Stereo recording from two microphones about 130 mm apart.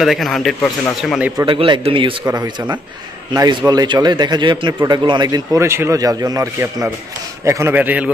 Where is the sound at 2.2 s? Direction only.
25° right (ahead or behind).